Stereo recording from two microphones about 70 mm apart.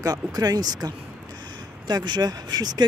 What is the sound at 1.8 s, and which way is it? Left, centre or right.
Speech, right.